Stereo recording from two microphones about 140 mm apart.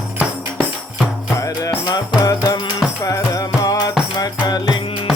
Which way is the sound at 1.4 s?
20° left (ahead or behind).